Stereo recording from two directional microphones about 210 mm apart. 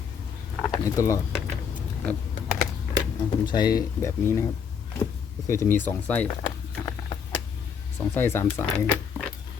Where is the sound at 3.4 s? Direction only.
20° left (ahead or behind).